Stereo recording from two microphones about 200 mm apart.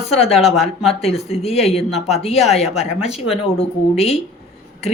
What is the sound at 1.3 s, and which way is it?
Speech, 30° left (ahead or behind).